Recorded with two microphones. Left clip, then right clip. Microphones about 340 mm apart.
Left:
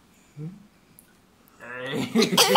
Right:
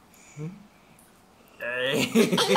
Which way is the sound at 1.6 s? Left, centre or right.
Centre.